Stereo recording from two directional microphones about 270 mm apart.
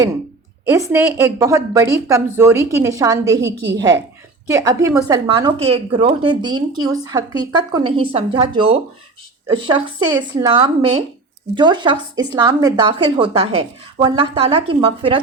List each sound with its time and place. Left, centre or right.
0.7 s speech: centre